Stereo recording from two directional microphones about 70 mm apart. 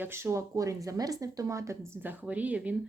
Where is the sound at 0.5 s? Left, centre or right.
Right.